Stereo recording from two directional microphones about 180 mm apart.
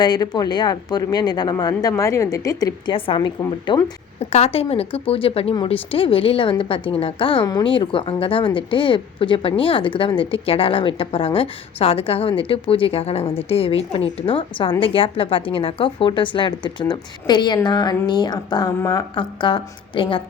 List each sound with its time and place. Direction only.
0.0 s a woman's voice: 20° left (ahead or behind)
4.2 s a woman's voice: 35° left (ahead or behind)